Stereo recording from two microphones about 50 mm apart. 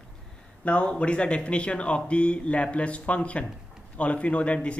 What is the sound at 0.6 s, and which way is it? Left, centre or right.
A man's voice, left.